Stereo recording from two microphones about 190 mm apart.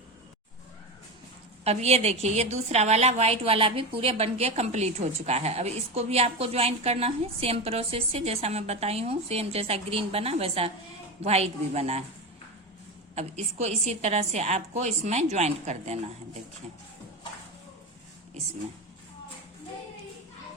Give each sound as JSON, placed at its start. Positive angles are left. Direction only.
{"t": 1.6, "sound": "a woman's voice", "side_deg": -35}
{"t": 13.1, "sound": "a woman's voice", "side_deg": -35}